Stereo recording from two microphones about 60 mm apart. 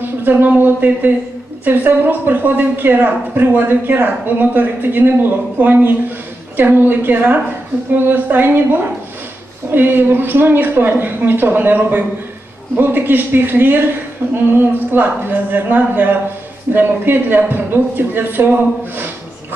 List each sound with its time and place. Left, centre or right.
0.0 s speech: right